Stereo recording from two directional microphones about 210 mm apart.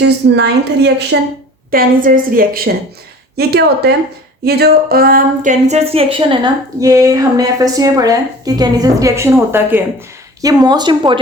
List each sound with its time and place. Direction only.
0.0 s a woman's voice: 55° right (ahead or behind)
1.7 s a woman's voice: 40° right (ahead or behind); by 11.2 s 20° right (ahead or behind)